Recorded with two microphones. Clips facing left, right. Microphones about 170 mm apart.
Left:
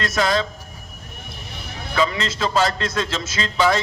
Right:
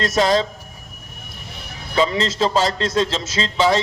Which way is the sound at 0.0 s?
35° right (ahead or behind).